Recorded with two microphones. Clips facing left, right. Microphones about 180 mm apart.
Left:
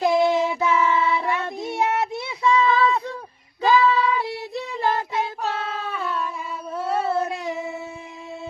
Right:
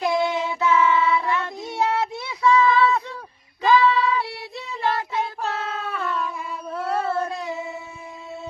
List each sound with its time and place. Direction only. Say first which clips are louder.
0.0 s child singing: left 4 dB; 30° left (ahead or behind)
3.6 s child singing: even; 40° left (ahead or behind)
5.4 s a sound: left 1 dB; centre (ahead or behind)
6.7 s child singing: left 1 dB; 5° left (ahead or behind)